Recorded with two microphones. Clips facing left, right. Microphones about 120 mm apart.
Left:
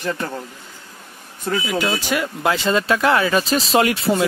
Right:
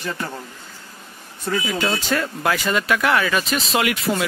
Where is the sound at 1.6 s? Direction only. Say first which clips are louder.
Left 1 dB; 10° left (ahead or behind).